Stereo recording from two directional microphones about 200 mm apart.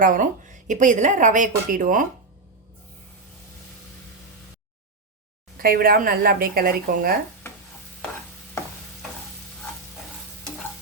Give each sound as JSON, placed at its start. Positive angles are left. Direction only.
{"t": 0.0, "sound": "a woman's voice", "side_deg": -40}
{"t": 5.5, "sound": "speech", "side_deg": -45}